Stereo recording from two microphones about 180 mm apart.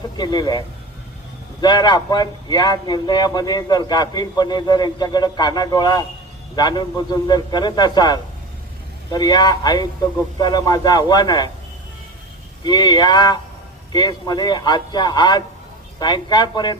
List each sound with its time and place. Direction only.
0.2 s speech: 25° left (ahead or behind)
1.6 s speech: 25° left (ahead or behind)
12.6 s speech: 25° left (ahead or behind)